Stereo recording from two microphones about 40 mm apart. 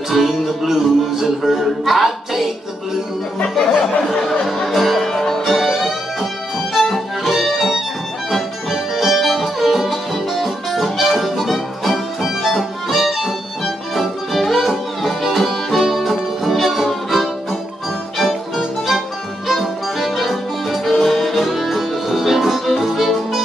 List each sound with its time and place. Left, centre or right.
0.1 s music: centre
3.5 s music: centre